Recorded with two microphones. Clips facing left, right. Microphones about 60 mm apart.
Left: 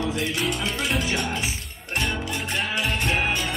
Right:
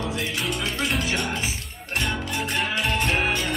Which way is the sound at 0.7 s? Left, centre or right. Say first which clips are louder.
Even; centre.